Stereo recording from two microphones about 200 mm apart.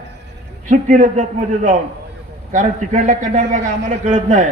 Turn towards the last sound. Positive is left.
turn(degrees=-40)  # may be behind; listen again after turning